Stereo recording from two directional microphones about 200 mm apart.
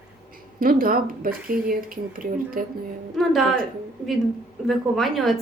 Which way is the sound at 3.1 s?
Centre (ahead or behind).